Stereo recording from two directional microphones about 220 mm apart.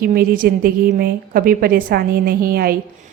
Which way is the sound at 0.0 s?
40° right (ahead or behind).